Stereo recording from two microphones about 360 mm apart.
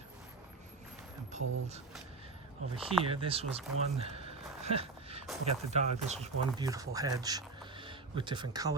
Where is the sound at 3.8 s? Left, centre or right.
Centre.